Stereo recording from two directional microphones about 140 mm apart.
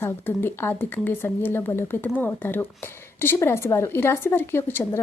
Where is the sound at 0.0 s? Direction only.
15° left (ahead or behind).